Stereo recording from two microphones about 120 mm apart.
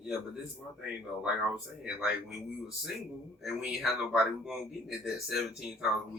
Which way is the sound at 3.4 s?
5° right (ahead or behind).